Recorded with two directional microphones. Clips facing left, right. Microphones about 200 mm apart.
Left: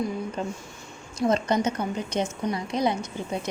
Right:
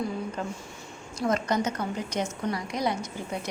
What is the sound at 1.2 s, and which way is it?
A woman's voice, 20° left (ahead or behind).